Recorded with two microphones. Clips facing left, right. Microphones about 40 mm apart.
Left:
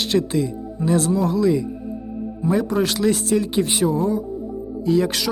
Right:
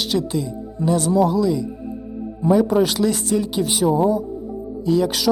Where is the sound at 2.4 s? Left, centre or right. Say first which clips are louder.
Right 4 dB; centre.